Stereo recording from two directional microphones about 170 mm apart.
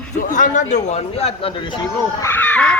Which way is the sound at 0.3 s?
45° left (ahead or behind).